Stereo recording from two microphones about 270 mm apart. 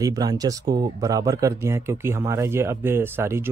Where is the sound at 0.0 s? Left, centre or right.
Centre.